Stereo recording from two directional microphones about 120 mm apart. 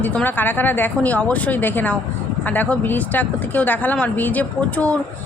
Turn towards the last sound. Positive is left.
turn(degrees=10)  # may be behind; listen again after turning